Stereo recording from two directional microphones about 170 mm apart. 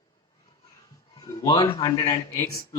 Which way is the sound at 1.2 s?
25° left (ahead or behind).